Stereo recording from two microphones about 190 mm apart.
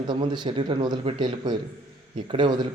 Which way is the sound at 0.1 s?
25° right (ahead or behind).